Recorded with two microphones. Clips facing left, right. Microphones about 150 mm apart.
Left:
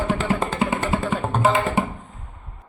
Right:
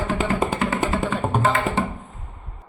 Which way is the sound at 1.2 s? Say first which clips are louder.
Right 1 dB; 10° right (ahead or behind).